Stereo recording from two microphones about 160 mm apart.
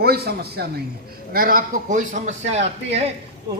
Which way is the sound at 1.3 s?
65° right (ahead or behind).